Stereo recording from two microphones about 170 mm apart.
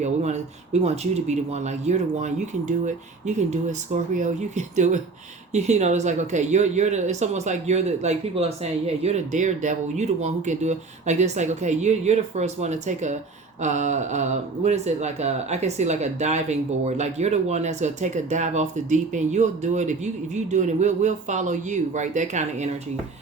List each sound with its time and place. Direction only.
0.0 s speech: 40° right (ahead or behind)